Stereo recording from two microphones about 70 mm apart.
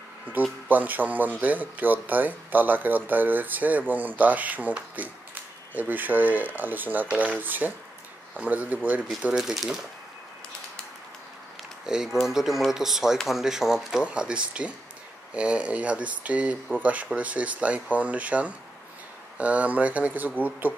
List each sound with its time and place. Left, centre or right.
0.3 s speech: right
9.3 s speech: centre
11.8 s speech: centre